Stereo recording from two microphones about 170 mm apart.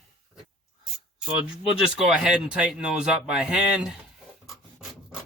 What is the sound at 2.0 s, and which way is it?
Speech, 5° right (ahead or behind).